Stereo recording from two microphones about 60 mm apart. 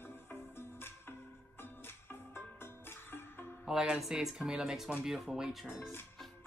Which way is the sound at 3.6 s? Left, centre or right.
Centre.